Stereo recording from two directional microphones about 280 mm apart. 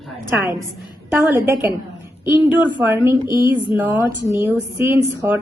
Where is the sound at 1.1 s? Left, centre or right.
Centre.